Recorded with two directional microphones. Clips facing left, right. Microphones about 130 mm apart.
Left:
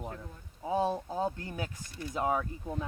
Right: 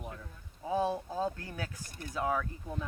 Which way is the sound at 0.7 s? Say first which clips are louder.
Left 1 dB; 20° left (ahead or behind).